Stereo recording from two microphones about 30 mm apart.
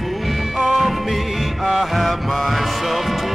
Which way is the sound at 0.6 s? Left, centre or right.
Centre.